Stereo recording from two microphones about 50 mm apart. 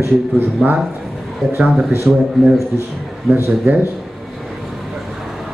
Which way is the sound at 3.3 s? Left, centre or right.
Right.